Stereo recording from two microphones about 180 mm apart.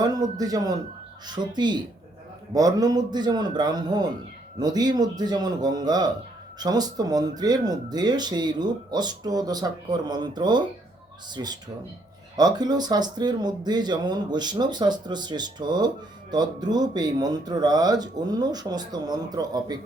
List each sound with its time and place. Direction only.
0.0 s speech: 20° right (ahead or behind)